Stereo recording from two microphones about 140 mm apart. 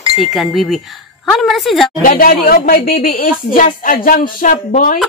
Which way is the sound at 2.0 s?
85° left.